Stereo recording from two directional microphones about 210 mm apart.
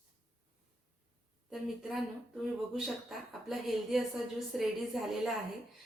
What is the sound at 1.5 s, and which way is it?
A woman's voice, centre (ahead or behind).